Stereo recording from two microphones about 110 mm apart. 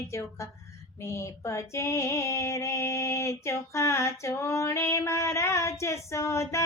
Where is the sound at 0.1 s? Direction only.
25° left (ahead or behind).